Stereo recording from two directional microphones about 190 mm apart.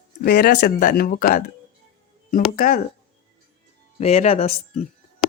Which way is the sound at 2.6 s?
45° left (ahead or behind).